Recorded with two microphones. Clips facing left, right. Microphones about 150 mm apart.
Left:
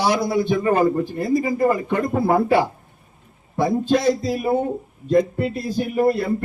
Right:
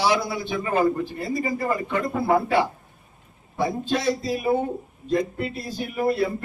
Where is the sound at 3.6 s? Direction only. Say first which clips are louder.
Left 6 dB; 50° left (ahead or behind).